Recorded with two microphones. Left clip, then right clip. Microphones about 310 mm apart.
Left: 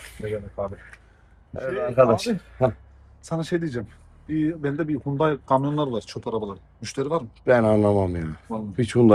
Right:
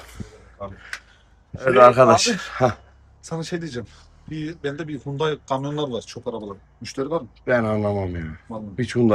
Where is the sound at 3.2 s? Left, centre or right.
Left.